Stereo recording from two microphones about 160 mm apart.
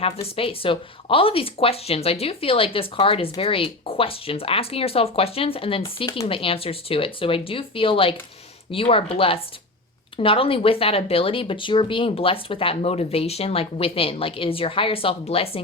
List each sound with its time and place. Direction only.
0.0 s speech: 35° left (ahead or behind)